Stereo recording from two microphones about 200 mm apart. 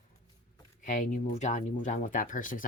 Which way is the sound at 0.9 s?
40° left (ahead or behind).